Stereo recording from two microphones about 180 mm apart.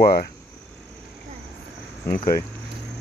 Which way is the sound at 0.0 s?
60° left (ahead or behind).